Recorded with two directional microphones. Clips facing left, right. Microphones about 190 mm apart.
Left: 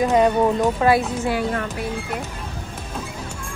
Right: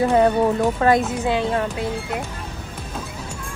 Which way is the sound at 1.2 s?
20° right (ahead or behind).